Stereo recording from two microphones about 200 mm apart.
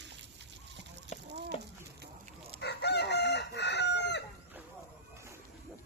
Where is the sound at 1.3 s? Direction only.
60° right (ahead or behind).